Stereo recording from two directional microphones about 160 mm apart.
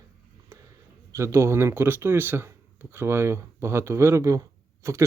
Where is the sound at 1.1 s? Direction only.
20° right (ahead or behind).